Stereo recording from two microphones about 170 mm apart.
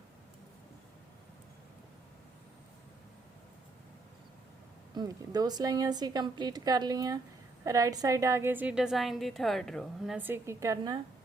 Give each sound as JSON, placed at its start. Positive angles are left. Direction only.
{"t": 4.9, "sound": "a woman's voice", "side_deg": -20}